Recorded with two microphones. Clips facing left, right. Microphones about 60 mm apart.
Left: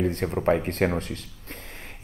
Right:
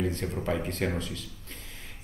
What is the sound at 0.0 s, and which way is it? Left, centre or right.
Speech, left.